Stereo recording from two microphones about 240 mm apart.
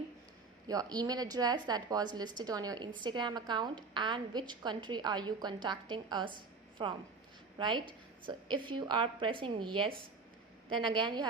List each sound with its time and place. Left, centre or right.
0.7 s a woman's voice: centre